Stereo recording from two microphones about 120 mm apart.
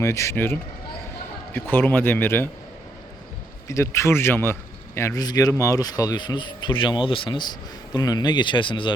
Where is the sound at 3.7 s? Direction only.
25° left (ahead or behind).